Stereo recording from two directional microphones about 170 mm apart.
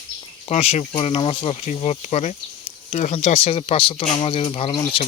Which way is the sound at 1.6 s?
40° left (ahead or behind).